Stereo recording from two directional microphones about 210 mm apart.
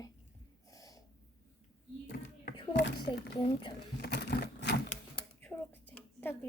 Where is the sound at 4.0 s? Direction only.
50° left (ahead or behind).